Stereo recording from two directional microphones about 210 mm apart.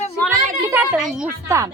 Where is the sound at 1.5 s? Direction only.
15° right (ahead or behind).